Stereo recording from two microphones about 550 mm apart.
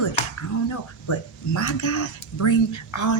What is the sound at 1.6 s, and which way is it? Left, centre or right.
Speech, left.